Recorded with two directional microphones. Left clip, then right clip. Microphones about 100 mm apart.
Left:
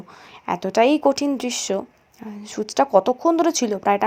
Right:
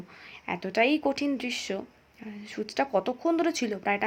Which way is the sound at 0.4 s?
50° left (ahead or behind).